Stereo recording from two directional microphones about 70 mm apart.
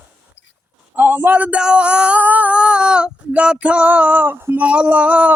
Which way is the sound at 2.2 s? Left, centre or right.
Right.